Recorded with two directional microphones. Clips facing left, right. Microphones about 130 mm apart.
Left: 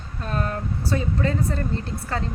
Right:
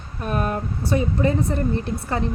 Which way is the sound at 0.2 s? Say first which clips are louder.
Right 3 dB; 15° right (ahead or behind).